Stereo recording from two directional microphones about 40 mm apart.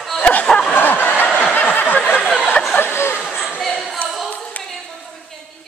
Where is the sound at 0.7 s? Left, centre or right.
Left.